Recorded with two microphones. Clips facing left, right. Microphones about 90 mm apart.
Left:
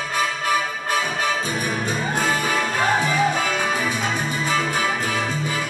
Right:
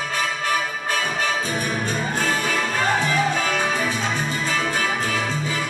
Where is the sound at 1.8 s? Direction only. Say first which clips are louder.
Left 1 dB; 10° left (ahead or behind).